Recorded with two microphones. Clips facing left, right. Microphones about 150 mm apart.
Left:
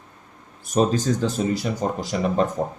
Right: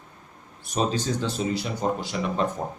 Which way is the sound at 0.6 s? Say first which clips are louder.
Left 5 dB; 45° left (ahead or behind).